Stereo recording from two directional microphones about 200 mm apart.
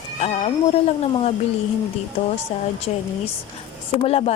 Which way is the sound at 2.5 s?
30° left (ahead or behind).